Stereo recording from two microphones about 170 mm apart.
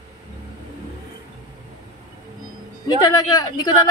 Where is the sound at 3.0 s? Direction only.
20° left (ahead or behind).